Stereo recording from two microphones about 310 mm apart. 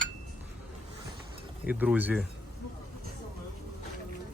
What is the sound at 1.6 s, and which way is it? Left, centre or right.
Speech, centre.